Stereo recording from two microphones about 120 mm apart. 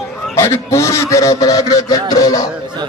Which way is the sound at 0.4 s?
25° left (ahead or behind).